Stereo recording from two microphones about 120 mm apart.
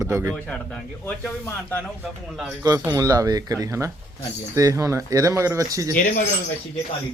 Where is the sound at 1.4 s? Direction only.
15° left (ahead or behind).